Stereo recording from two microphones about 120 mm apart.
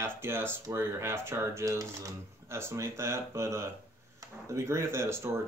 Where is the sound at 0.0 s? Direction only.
20° right (ahead or behind).